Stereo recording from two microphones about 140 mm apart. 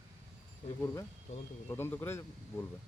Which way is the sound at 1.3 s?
55° left (ahead or behind).